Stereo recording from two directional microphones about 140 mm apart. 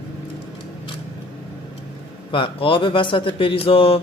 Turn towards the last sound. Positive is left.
turn(degrees=40)  # may be behind; listen again after turning